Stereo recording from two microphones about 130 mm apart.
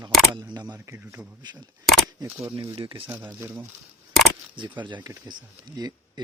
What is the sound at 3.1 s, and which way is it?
Speech, 20° right (ahead or behind).